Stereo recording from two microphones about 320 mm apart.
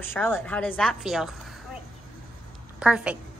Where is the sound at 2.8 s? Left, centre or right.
Centre.